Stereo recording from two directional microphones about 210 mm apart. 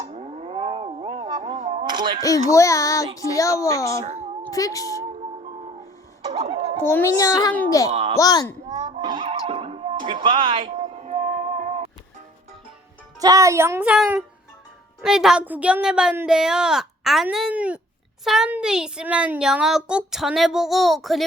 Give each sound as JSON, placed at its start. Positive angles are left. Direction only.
{"t": 0.0, "sound": "a sound", "side_deg": -30}
{"t": 1.9, "sound": "a sound", "side_deg": -20}
{"t": 2.2, "sound": "a child's voice", "side_deg": 15}
{"t": 4.0, "sound": "a sound", "side_deg": -30}
{"t": 4.5, "sound": "a child's voice", "side_deg": 15}
{"t": 5.4, "sound": "music", "side_deg": -30}
{"t": 6.3, "sound": "a sound", "side_deg": -30}
{"t": 6.8, "sound": "a child's voice", "side_deg": 10}
{"t": 8.7, "sound": "music", "side_deg": -30}
{"t": 10.2, "sound": "speech", "side_deg": -25}
{"t": 10.7, "sound": "music", "side_deg": -35}
{"t": 13.1, "sound": "speech", "side_deg": -15}